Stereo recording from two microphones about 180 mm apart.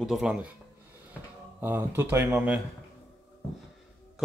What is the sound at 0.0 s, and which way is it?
Speech, 5° right (ahead or behind).